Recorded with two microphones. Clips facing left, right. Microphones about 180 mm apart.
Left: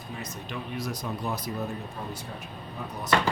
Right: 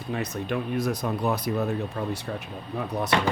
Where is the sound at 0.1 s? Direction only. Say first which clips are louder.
Right 9 dB; 60° right (ahead or behind).